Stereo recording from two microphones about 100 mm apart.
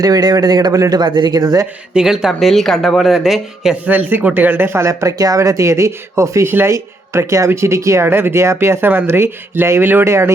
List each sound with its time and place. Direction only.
0.0 s speech: 40° right (ahead or behind)
1.9 s speech: 5° right (ahead or behind)
3.8 s speech: 15° right (ahead or behind)